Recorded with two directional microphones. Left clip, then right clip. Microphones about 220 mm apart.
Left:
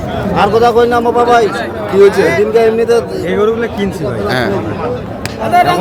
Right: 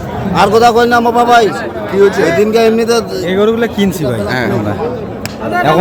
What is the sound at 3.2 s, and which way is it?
Speech, 30° right (ahead or behind).